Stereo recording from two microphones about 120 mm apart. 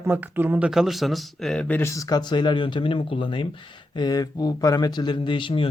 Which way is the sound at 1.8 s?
25° left (ahead or behind).